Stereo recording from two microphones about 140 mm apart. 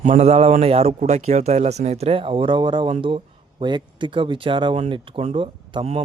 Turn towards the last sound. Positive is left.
turn(degrees=-40)  # may be behind; listen again after turning